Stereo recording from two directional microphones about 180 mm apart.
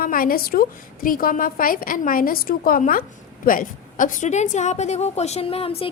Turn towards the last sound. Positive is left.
turn(degrees=30)  # may be behind; listen again after turning